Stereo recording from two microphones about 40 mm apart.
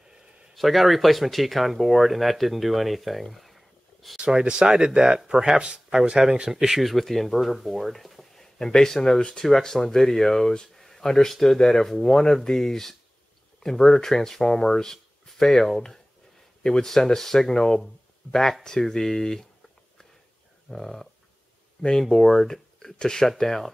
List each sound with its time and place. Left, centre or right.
0.6 s speech: centre
4.3 s speech: right
6.9 s speech: centre
8.5 s speech: centre
9.2 s speech: left
9.5 s speech: centre
20.7 s speech: centre